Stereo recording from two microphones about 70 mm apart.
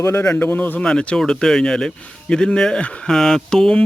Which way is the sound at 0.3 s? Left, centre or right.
Left.